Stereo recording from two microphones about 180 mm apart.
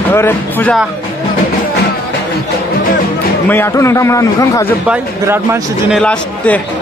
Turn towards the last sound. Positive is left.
turn(degrees=5)  # may be behind; listen again after turning